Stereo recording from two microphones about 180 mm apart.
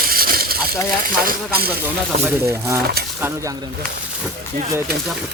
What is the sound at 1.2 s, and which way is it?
Speech, 55° right (ahead or behind).